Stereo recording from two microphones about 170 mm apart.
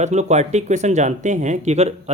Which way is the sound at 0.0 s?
40° right (ahead or behind).